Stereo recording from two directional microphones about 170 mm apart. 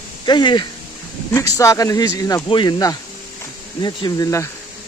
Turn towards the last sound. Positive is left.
turn(degrees=20)  # may be behind; listen again after turning